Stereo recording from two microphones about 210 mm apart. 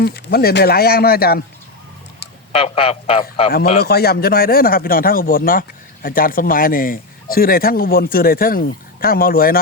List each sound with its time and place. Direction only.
0.0 s speech: 50° left (ahead or behind)
2.5 s speech: 25° left (ahead or behind)
3.8 s speech: 45° left (ahead or behind)